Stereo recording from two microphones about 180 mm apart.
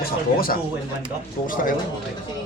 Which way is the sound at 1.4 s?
50° left (ahead or behind).